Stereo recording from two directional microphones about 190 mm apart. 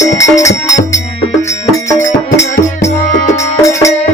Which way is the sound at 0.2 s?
15° left (ahead or behind).